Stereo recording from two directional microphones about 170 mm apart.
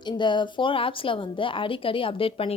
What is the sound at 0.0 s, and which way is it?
A woman's voice, 25° left (ahead or behind).